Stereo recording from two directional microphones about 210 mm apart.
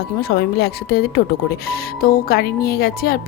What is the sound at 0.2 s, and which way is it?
A woman's voice, 45° left (ahead or behind).